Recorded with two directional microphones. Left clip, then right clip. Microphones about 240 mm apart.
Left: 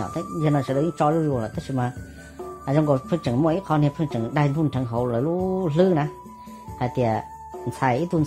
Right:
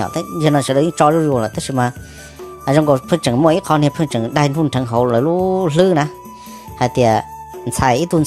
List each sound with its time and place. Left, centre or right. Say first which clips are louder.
0.0 s speech: right 8 dB; right